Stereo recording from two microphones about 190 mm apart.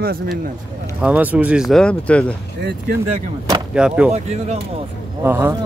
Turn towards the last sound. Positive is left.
turn(degrees=-10)  # may be behind; listen again after turning